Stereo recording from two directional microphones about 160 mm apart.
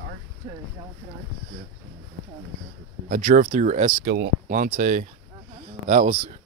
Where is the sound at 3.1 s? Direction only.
60° right (ahead or behind).